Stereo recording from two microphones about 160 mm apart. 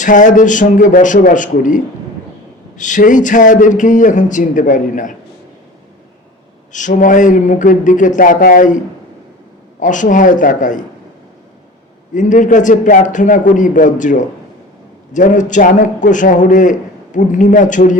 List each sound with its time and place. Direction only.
0.0 s a man's voice: 55° left (ahead or behind)
6.7 s a man's voice: 55° left (ahead or behind)
9.8 s a man's voice: 55° left (ahead or behind)
12.1 s a man's voice: 50° left (ahead or behind)